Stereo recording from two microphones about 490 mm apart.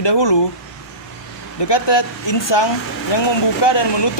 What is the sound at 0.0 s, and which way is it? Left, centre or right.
Speech, left.